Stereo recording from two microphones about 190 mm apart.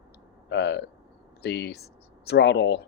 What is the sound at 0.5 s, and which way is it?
Speech, 60° left (ahead or behind).